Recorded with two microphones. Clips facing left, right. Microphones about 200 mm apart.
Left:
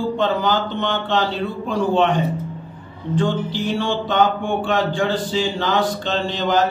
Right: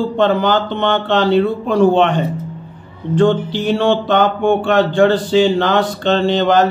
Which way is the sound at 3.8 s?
65° right (ahead or behind).